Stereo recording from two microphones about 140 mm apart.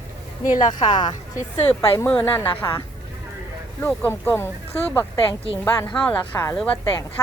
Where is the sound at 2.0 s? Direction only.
15° left (ahead or behind).